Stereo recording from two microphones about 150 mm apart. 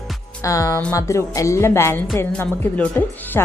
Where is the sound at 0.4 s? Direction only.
20° left (ahead or behind).